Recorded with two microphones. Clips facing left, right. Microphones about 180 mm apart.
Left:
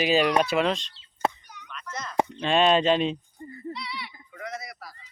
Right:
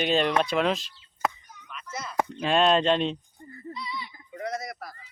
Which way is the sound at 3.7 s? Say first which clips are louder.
Even; 75° left (ahead or behind).